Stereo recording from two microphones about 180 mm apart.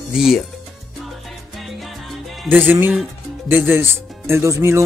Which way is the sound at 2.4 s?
10° right (ahead or behind).